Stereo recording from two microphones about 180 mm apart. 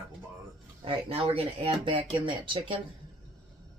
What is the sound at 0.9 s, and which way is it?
Speech, 30° right (ahead or behind).